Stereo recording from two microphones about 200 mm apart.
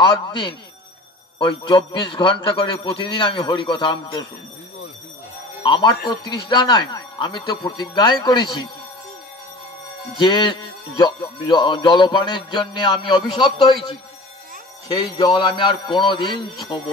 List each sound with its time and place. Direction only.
0.0 s speech: 25° left (ahead or behind)
5.6 s speech: 25° left (ahead or behind)
10.1 s speech: 25° left (ahead or behind)
14.9 s speech: 20° left (ahead or behind)